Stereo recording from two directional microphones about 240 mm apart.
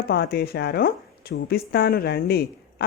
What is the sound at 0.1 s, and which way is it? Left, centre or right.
Speech, left.